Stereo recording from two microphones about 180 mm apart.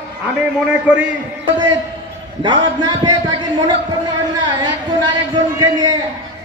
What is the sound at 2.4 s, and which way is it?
A man's voice, 25° right (ahead or behind).